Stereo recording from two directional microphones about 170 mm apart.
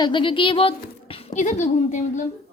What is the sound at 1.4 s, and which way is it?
Speech, 45° left (ahead or behind).